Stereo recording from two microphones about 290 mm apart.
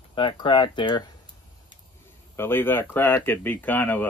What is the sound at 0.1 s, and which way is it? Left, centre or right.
Speech, centre.